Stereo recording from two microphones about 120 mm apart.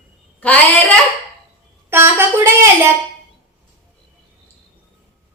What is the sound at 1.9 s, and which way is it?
A woman's voice, 20° right (ahead or behind).